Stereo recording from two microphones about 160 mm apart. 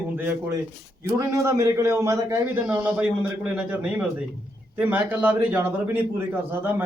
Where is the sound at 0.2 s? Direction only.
15° right (ahead or behind).